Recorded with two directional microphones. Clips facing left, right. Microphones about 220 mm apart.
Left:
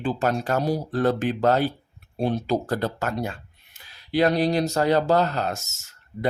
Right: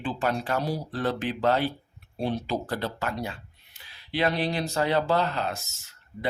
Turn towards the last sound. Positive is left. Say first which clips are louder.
# left 3 dB
turn(degrees=45)  # may be behind; listen again after turning